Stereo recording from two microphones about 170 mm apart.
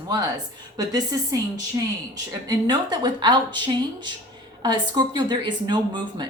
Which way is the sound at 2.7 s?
25° right (ahead or behind).